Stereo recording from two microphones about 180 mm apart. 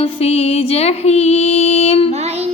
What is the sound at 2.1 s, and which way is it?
Child singing, 35° right (ahead or behind).